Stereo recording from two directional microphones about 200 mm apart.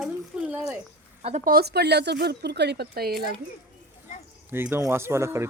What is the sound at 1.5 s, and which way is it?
Speech, 55° right (ahead or behind).